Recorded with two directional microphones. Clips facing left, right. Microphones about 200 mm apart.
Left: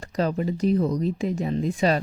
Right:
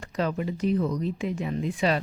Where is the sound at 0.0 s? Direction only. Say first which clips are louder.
Left 3 dB; 35° left (ahead or behind).